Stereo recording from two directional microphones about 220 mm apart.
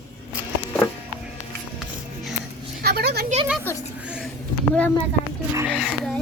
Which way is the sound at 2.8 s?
50° right (ahead or behind).